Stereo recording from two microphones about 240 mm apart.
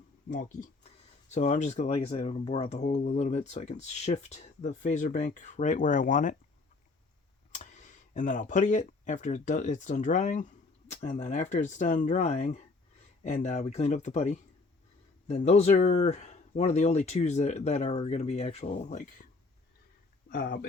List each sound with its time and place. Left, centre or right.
0.3 s speech: left
7.5 s speech: left
20.3 s speech: left